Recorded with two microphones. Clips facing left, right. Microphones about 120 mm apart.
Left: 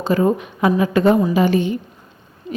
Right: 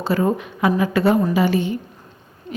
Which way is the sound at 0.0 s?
15° left (ahead or behind).